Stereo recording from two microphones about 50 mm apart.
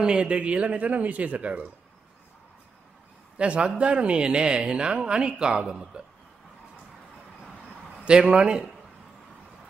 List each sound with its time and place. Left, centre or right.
0.0 s speech: centre
3.3 s speech: right
8.0 s speech: right